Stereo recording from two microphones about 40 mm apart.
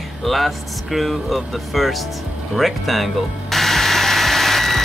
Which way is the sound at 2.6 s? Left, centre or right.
Centre.